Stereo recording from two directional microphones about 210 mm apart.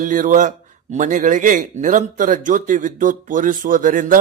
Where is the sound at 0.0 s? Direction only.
40° right (ahead or behind).